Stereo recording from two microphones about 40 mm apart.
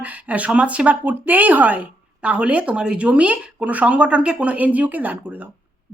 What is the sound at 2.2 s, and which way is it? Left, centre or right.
Speech, right.